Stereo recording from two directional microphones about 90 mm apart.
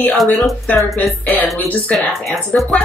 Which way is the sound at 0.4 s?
15° left (ahead or behind).